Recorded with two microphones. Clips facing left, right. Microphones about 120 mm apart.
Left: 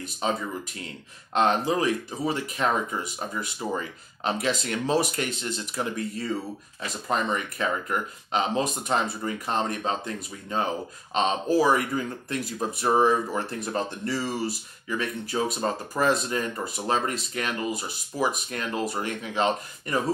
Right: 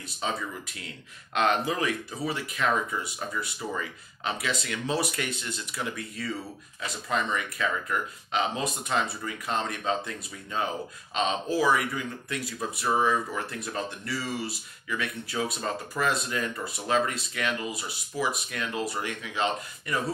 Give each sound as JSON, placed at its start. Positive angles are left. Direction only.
{"t": 1.3, "sound": "speech", "side_deg": 35}
{"t": 12.9, "sound": "speech", "side_deg": 35}